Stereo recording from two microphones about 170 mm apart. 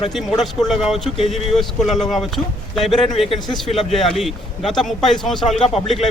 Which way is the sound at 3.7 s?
Centre (ahead or behind).